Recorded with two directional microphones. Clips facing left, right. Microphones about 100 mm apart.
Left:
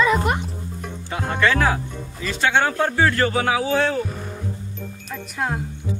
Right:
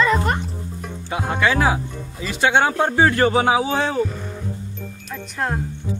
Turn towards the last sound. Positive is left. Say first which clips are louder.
# right 1 dB
turn(degrees=0)  # may be behind; listen again after turning